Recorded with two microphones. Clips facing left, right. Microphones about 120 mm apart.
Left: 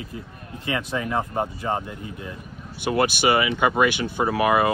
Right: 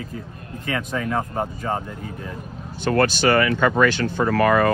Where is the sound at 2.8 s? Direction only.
15° left (ahead or behind).